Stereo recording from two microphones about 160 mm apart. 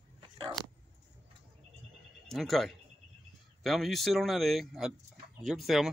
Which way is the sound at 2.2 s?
Centre (ahead or behind).